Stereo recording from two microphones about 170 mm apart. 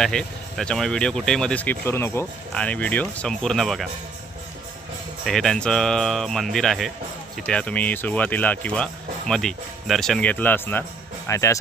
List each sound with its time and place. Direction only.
0.0 s speech: 5° left (ahead or behind)
5.2 s speech: centre (ahead or behind); by 11.5 s 15° left (ahead or behind)